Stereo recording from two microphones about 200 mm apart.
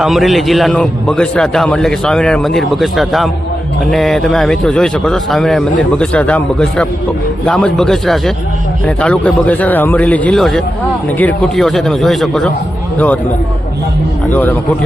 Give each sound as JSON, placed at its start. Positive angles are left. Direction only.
{"t": 0.0, "sound": "a man's voice", "side_deg": 0}
{"t": 14.3, "sound": "a man's voice", "side_deg": 10}